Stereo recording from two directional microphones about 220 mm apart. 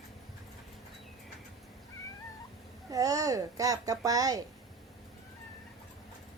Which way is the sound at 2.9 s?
15° right (ahead or behind).